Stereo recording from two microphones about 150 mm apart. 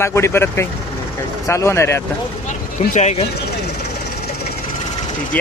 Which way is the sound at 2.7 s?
50° left (ahead or behind).